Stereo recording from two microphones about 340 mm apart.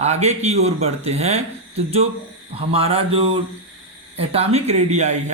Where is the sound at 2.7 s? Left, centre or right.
Centre.